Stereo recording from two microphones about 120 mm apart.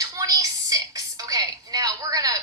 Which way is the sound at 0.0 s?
30° right (ahead or behind).